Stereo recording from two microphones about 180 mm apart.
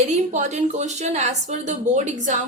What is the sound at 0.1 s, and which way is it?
Speech, 40° right (ahead or behind).